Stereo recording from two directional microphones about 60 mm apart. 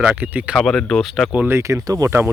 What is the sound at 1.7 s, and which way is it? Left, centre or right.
Speech, right.